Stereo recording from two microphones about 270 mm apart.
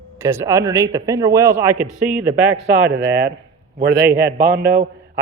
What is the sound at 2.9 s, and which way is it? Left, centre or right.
A man's voice, right.